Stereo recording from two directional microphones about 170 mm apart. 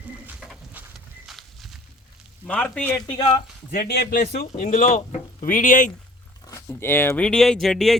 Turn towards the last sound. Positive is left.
turn(degrees=0)  # may be behind; listen again after turning